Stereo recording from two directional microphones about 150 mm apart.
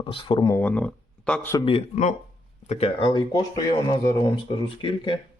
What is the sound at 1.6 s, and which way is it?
Speech, 40° left (ahead or behind).